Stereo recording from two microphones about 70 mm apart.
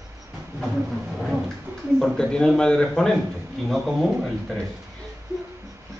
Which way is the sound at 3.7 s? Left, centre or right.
Centre.